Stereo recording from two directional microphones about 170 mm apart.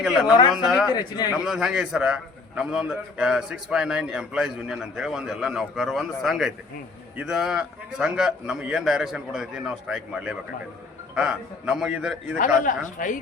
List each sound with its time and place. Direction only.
0.0 s a man's voice: centre (ahead or behind)
0.9 s speech: 25° left (ahead or behind)
1.3 s a man's voice: 5° right (ahead or behind)
12.6 s speech: 50° left (ahead or behind)